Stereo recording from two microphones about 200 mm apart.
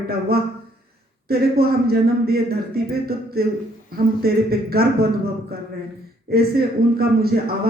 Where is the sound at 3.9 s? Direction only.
50° right (ahead or behind).